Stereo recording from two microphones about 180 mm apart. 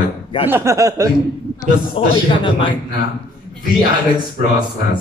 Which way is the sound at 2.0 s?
30° left (ahead or behind).